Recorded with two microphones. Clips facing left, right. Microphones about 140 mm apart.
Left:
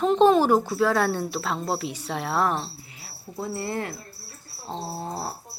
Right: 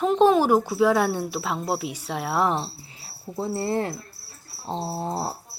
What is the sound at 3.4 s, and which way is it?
Speech, 30° right (ahead or behind).